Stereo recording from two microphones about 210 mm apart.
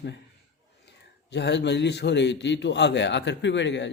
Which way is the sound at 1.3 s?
55° left (ahead or behind).